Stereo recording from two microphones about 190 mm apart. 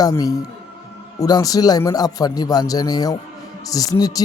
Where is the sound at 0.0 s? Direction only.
15° left (ahead or behind).